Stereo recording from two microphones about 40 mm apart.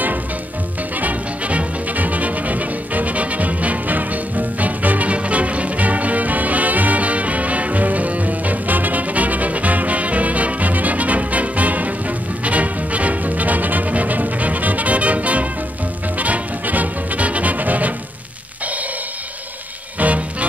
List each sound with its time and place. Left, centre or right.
0.9 s music: right
20.0 s music: right